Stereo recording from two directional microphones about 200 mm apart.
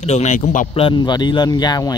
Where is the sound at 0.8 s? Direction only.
20° left (ahead or behind).